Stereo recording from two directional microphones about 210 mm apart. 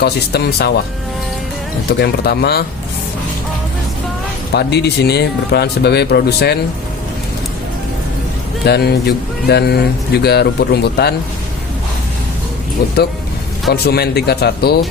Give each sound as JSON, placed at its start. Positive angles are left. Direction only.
{"t": 0.0, "sound": "speech", "side_deg": 50}
{"t": 1.9, "sound": "speech", "side_deg": 50}
{"t": 4.5, "sound": "speech", "side_deg": 50}
{"t": 8.6, "sound": "speech", "side_deg": 50}
{"t": 13.7, "sound": "speech", "side_deg": 50}